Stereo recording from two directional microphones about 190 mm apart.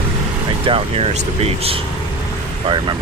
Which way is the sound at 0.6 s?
30° right (ahead or behind).